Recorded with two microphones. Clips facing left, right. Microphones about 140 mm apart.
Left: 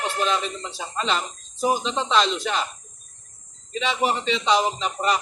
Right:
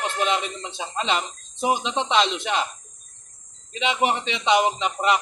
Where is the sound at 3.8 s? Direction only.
20° right (ahead or behind).